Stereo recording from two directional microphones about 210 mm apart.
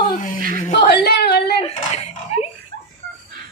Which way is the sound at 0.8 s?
50° left (ahead or behind).